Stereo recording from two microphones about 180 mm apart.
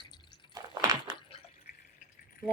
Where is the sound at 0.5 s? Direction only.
20° right (ahead or behind).